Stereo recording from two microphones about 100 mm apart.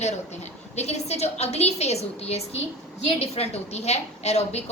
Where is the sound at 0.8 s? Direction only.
90° left.